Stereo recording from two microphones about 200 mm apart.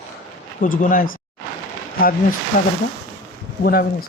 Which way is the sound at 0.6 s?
45° left (ahead or behind).